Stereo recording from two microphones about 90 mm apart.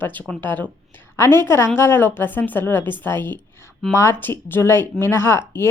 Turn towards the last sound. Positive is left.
turn(degrees=25)  # may be behind; listen again after turning